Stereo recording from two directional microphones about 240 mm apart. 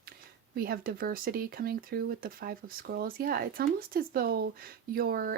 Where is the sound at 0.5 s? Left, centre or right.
Right.